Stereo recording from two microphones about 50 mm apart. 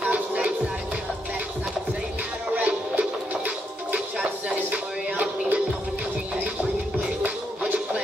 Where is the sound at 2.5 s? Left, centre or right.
Right.